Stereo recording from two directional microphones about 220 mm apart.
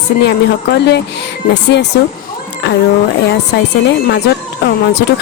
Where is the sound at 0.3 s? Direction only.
50° left (ahead or behind).